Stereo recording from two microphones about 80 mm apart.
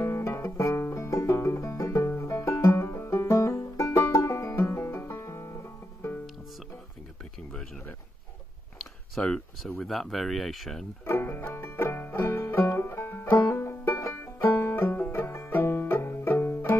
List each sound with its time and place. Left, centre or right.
0.0 s music: left
9.2 s speech: centre
9.6 s speech: centre
11.1 s banjo: left